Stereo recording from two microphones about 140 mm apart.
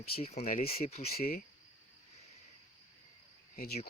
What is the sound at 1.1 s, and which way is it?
Speech, 90° left.